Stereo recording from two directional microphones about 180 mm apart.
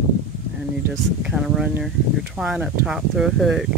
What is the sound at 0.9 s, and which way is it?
Speech, 5° right (ahead or behind).